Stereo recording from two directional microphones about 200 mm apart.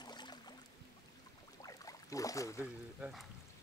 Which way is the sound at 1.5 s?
15° left (ahead or behind).